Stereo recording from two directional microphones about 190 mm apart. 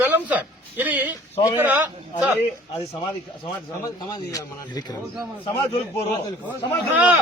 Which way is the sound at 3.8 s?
20° left (ahead or behind).